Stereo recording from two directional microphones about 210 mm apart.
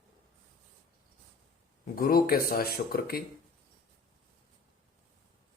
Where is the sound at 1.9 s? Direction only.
45° left (ahead or behind).